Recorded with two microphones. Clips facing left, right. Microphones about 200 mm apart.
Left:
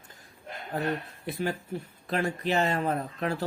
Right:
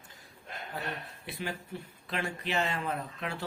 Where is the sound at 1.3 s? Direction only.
40° left (ahead or behind).